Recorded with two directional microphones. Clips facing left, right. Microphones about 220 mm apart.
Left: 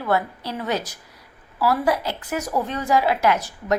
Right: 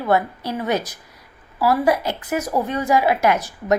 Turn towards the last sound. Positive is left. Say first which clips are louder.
# right 2 dB
turn(degrees=-15)  # may be behind; listen again after turning